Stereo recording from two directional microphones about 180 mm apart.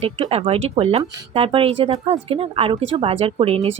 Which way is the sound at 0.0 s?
35° right (ahead or behind).